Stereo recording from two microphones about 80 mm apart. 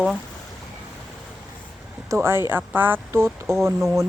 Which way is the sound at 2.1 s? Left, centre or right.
Right.